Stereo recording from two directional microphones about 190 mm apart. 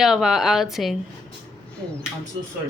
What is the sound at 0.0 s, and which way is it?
Speech, centre (ahead or behind).